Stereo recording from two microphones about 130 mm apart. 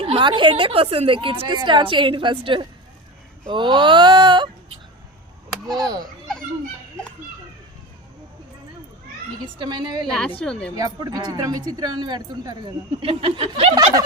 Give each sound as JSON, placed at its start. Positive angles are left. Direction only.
{"t": 0.0, "sound": "a woman's voice", "side_deg": -40}
{"t": 5.6, "sound": "a woman's voice", "side_deg": 5}
{"t": 9.6, "sound": "a woman's voice", "side_deg": -35}
{"t": 10.1, "sound": "a woman's voice", "side_deg": 10}
{"t": 10.8, "sound": "a woman's voice", "side_deg": -30}
{"t": 13.0, "sound": "speech", "side_deg": -45}